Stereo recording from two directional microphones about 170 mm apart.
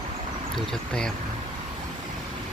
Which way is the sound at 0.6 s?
5° left (ahead or behind).